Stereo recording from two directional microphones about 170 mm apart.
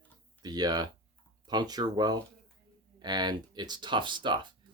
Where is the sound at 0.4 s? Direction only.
25° right (ahead or behind).